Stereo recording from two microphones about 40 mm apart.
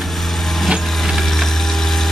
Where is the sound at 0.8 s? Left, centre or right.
Centre.